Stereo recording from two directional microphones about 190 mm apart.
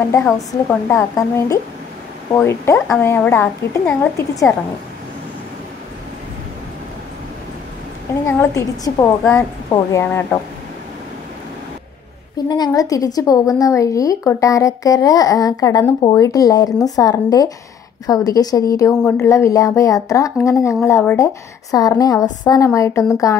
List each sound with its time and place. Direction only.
0.1 s a woman's voice: 10° left (ahead or behind)
8.3 s a woman's voice: 15° left (ahead or behind)
12.4 s a woman's voice: 20° left (ahead or behind)